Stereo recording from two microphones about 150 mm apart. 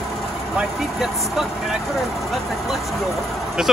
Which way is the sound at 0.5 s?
Centre (ahead or behind).